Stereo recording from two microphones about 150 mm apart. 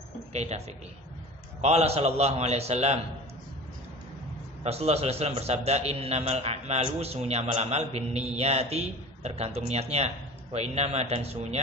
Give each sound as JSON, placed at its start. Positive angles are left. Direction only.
{"t": 0.3, "sound": "speech", "side_deg": -50}
{"t": 1.6, "sound": "a man's voice", "side_deg": -45}
{"t": 4.6, "sound": "a man's voice", "side_deg": -45}